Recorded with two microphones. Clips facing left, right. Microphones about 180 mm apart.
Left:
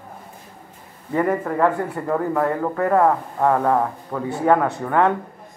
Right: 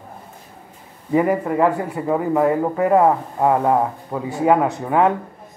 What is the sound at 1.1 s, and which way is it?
Speech, 10° right (ahead or behind).